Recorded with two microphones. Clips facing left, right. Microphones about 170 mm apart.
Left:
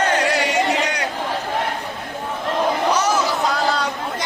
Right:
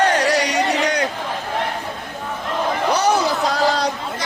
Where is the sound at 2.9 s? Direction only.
35° right (ahead or behind).